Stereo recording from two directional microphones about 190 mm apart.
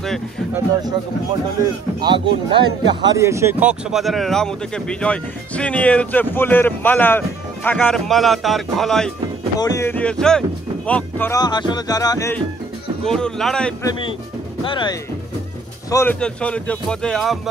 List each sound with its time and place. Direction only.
2.0 s a man's voice: 20° right (ahead or behind); by 9.1 s centre (ahead or behind)
9.6 s speech: 15° left (ahead or behind)
13.0 s a man's voice: 5° left (ahead or behind)
13.8 s speech: 25° left (ahead or behind)
15.9 s a man's voice: 10° left (ahead or behind)